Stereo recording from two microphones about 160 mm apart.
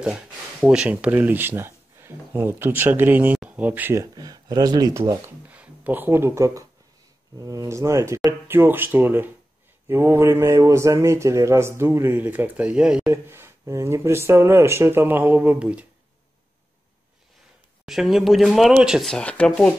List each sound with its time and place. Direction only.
0.0 s speech: 5° right (ahead or behind); by 5.2 s 25° right (ahead or behind)
5.5 s speech: 10° right (ahead or behind)
17.8 s speech: centre (ahead or behind)